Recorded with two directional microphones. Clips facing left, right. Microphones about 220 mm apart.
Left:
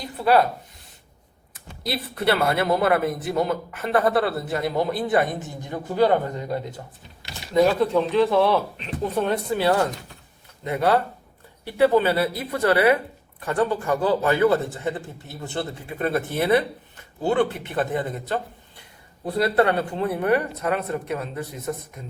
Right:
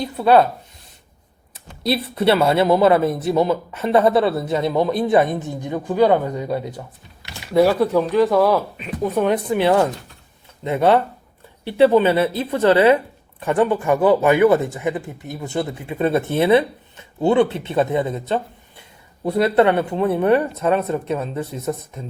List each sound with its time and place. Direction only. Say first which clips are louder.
0.0 s speech: right 5 dB; 25° right (ahead or behind)
1.8 s speech: right 6 dB; 25° right (ahead or behind)
5.3 s speech: right 6 dB; 55° right (ahead or behind)
5.6 s speech: right 4 dB; 20° right (ahead or behind)
7.5 s speech: right 3 dB; 10° right (ahead or behind); by 22.0 s 25° right (ahead or behind)